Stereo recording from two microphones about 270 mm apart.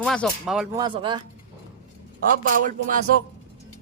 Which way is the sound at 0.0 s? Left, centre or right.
Centre.